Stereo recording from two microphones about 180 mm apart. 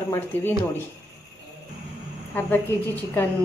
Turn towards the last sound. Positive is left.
turn(degrees=10)  # may be behind; listen again after turning